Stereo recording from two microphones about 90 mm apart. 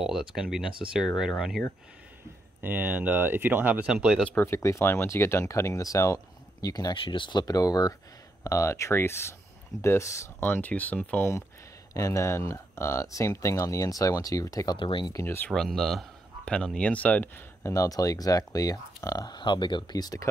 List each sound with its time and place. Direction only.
0.0 s speech: 5° right (ahead or behind)
2.6 s speech: 20° right (ahead or behind)
3.8 s speech: 10° right (ahead or behind)
4.4 s speech: 30° left (ahead or behind)
7.0 s speech: 65° left (ahead or behind)
7.4 s speech: 45° left (ahead or behind)
10.4 s speech: 20° left (ahead or behind)
11.9 s speech: 35° left (ahead or behind)
14.8 s speech: 70° left (ahead or behind)
15.2 s speech: 25° left (ahead or behind)
15.5 s speech: 5° left (ahead or behind)
17.6 s speech: 40° left (ahead or behind)